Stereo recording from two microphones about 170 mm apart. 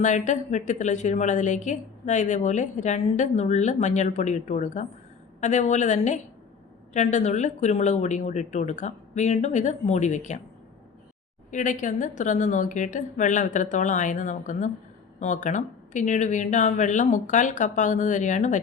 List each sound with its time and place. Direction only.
0.0 s a woman's voice: 45° left (ahead or behind)
11.5 s a woman's voice: 50° left (ahead or behind)